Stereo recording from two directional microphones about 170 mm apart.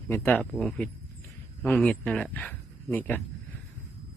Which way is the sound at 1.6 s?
10° left (ahead or behind).